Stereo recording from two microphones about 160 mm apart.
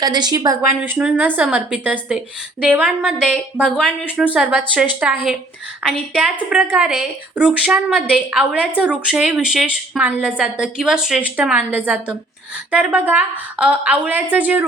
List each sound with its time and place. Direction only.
0.0 s a woman's voice: 25° right (ahead or behind)
0.9 s a woman's voice: 10° right (ahead or behind)